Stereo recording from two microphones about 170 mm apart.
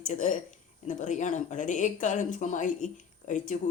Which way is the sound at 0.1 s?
50° left (ahead or behind).